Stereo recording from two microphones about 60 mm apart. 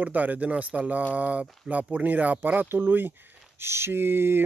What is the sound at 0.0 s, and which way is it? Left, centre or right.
Speech, right.